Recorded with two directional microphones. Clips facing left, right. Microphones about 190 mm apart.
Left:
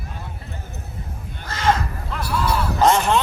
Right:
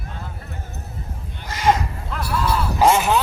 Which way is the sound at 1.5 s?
15° right (ahead or behind).